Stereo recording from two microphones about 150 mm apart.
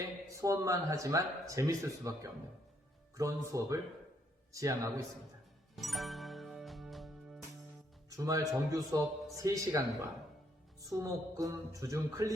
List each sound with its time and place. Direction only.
0.3 s speech: 20° right (ahead or behind)
5.7 s music: centre (ahead or behind)
8.1 s speech: 20° right (ahead or behind)